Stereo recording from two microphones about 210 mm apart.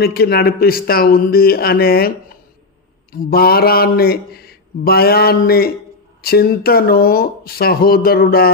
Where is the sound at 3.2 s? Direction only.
45° left (ahead or behind).